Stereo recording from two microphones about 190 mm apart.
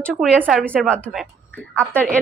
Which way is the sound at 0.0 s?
5° left (ahead or behind).